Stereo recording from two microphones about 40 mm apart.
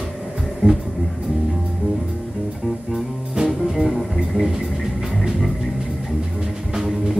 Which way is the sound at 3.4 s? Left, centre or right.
Centre.